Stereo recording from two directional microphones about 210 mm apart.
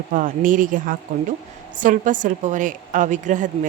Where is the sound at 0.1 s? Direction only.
40° right (ahead or behind).